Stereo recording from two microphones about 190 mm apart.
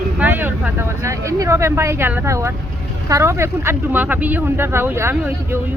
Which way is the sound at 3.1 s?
15° right (ahead or behind).